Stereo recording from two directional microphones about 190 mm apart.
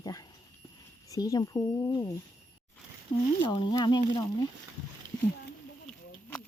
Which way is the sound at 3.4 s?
25° left (ahead or behind).